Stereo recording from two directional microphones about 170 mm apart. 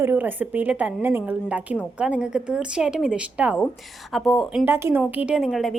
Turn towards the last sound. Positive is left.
turn(degrees=0)  # may be behind; listen again after turning